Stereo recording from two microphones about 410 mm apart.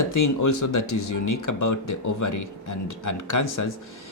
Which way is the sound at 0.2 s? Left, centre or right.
Left.